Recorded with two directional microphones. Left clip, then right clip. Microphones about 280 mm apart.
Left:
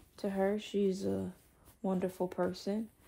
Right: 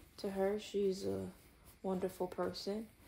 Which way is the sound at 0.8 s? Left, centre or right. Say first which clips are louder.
Left 3 dB; left.